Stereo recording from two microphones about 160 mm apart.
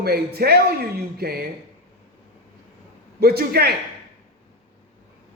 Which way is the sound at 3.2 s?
85° right.